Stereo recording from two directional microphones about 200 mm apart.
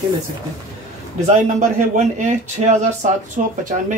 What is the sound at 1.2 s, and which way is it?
Speech, 35° right (ahead or behind).